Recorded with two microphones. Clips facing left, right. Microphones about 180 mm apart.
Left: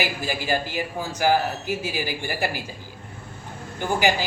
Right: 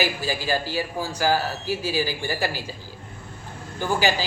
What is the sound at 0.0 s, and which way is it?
A man's voice, 20° left (ahead or behind).